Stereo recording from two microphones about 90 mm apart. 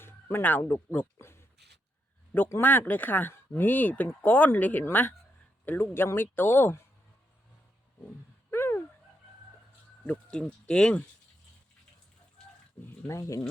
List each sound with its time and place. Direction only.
0.0 s speech: 25° left (ahead or behind)
8.4 s fowl: 25° left (ahead or behind)
10.0 s speech: 10° left (ahead or behind)
13.1 s speech: 35° left (ahead or behind)